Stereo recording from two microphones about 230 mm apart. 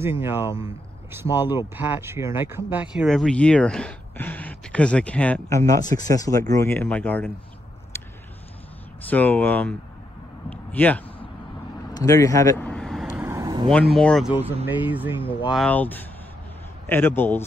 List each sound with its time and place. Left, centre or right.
0.2 s speech: centre
5.7 s speech: centre
7.9 s a sound: centre
9.1 s speech: centre
10.5 s a sound: centre
11.9 s vehicle: centre
13.0 s vehicle: centre
13.9 s speech: centre
15.5 s speech: centre